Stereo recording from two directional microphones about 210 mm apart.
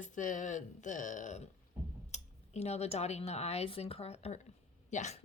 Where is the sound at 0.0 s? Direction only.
35° left (ahead or behind).